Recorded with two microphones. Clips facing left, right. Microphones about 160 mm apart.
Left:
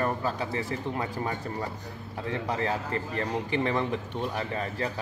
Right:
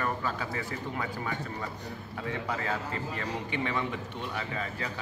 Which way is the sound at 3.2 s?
35° left (ahead or behind).